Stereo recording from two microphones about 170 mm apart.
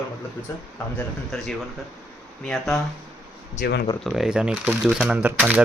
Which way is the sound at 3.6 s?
65° left (ahead or behind).